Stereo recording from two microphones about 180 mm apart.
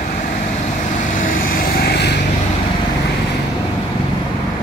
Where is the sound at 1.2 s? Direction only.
55° left (ahead or behind).